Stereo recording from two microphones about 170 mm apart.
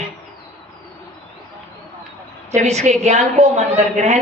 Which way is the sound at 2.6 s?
40° right (ahead or behind).